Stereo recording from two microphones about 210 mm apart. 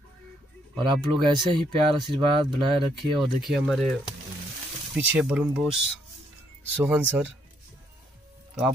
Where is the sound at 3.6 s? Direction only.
Centre (ahead or behind).